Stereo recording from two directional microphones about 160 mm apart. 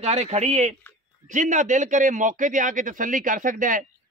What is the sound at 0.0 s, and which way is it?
A man's voice, 45° right (ahead or behind).